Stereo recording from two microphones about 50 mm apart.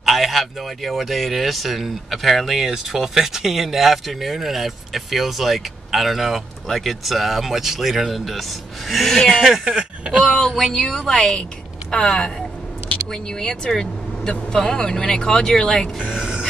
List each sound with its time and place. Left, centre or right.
0.0 s speech: centre
9.3 s speech: centre
9.8 s a sound: centre
10.2 s a woman's voice: centre
16.0 s speech: centre